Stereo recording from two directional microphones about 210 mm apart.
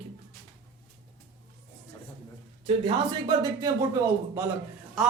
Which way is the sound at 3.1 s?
15° right (ahead or behind).